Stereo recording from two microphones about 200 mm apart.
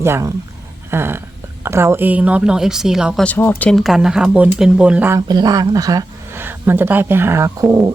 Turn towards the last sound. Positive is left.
turn(degrees=-15)  # may be behind; listen again after turning